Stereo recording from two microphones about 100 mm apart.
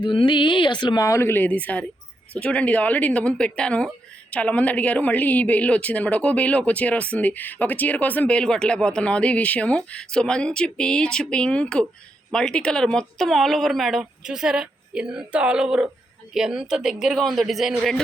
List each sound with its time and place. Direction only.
0.0 s speech: 50° left (ahead or behind)
1.0 s a woman's voice: 25° left (ahead or behind); by 17.7 s centre (ahead or behind)